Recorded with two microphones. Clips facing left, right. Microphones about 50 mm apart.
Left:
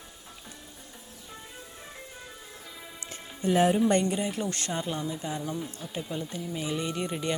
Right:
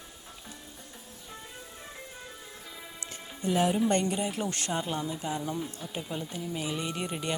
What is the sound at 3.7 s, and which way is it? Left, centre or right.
Speech, centre.